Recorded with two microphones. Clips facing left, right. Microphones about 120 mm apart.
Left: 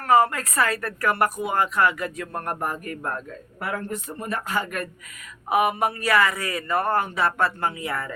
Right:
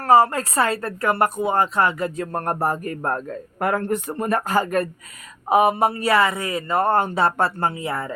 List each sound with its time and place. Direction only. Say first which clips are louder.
0.0 s a man's voice: right 3 dB; 35° right (ahead or behind)